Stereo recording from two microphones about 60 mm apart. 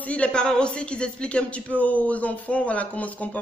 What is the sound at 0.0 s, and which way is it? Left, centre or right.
Speech, left.